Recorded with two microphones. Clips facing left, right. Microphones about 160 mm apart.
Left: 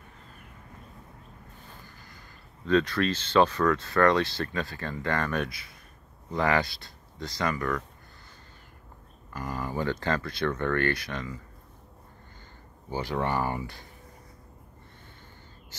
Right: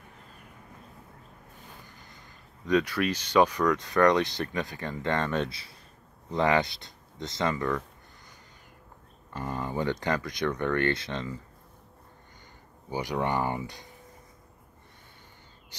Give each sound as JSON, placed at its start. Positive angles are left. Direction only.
{"t": 1.9, "sound": "speech", "side_deg": -20}
{"t": 9.3, "sound": "speech", "side_deg": -25}
{"t": 12.9, "sound": "speech", "side_deg": -15}